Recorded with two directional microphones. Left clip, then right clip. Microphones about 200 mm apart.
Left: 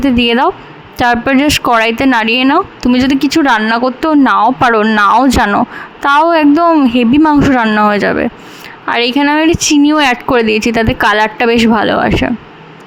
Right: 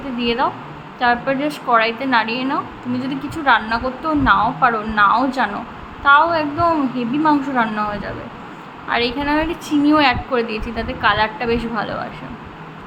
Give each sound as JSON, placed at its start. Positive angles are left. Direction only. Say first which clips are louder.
{"t": 0.2, "sound": "a woman's voice", "louder": "left 4 dB", "side_deg": 60}